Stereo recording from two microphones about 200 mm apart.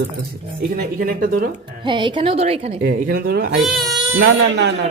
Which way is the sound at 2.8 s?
50° right (ahead or behind).